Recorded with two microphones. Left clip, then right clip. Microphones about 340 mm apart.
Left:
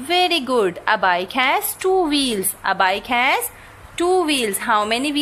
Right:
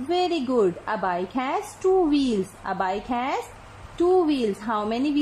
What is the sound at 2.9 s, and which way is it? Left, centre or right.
Speech, left.